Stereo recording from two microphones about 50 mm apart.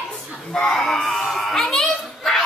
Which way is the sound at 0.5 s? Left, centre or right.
Centre.